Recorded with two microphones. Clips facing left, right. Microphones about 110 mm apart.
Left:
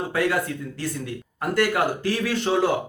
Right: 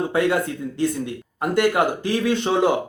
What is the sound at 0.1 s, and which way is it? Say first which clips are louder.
Speech: right 3 dB; 20° right (ahead or behind).